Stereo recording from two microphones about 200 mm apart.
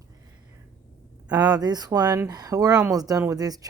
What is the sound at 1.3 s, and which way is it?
A woman's voice, 20° right (ahead or behind).